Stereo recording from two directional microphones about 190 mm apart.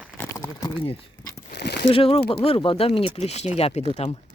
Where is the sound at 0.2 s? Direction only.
15° left (ahead or behind).